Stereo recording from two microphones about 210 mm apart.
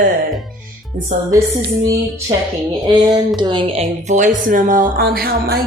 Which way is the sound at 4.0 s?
35° right (ahead or behind).